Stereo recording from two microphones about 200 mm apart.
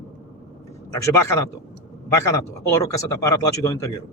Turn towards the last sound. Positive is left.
turn(degrees=15)  # may be behind; listen again after turning